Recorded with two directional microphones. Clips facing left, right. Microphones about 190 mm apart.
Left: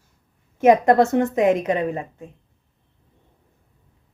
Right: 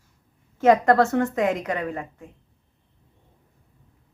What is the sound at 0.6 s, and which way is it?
A woman's voice, 20° left (ahead or behind).